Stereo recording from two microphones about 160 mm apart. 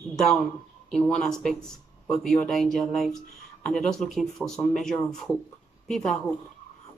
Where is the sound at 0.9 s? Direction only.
5° left (ahead or behind).